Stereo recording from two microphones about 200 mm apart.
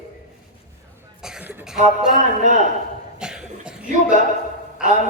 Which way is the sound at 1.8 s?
40° right (ahead or behind).